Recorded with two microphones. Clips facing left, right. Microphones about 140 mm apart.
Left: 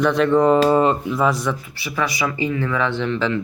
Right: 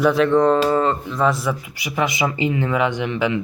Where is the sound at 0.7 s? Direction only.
15° left (ahead or behind).